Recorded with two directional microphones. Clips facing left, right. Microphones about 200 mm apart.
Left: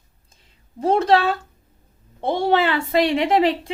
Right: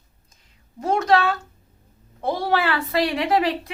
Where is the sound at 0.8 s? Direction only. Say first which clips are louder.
Left 2 dB; 30° left (ahead or behind).